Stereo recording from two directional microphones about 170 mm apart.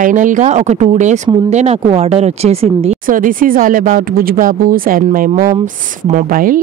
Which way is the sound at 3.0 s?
55° right (ahead or behind).